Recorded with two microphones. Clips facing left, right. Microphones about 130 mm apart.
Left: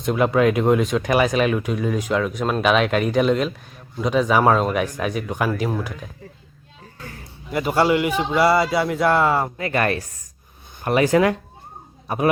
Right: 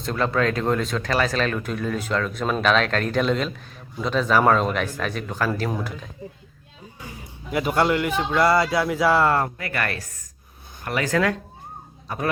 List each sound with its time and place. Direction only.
0.0 s speech: 15° left (ahead or behind)
7.0 s music: 15° right (ahead or behind)
7.5 s a man's voice: centre (ahead or behind)
9.6 s speech: 20° left (ahead or behind)